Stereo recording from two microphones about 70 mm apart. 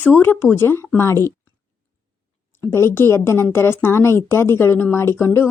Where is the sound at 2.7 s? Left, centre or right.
Left.